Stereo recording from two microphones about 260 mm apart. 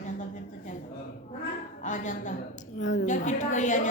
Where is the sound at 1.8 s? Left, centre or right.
Left.